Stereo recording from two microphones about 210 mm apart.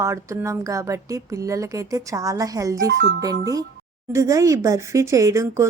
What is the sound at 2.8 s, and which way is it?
Speech, 55° right (ahead or behind).